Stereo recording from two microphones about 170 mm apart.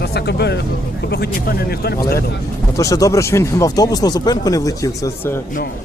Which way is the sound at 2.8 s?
20° left (ahead or behind).